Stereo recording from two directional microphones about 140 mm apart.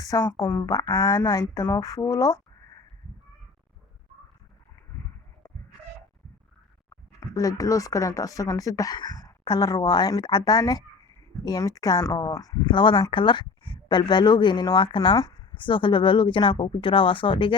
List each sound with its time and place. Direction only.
0.0 s a woman's voice: 20° left (ahead or behind)
6.9 s a woman's voice: 25° left (ahead or behind)